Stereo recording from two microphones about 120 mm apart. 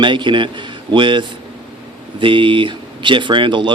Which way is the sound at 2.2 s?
45° right (ahead or behind).